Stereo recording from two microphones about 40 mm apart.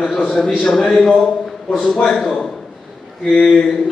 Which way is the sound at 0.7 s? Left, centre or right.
Centre.